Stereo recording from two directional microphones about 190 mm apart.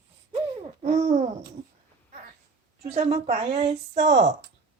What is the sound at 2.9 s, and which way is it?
A woman's voice, 35° right (ahead or behind).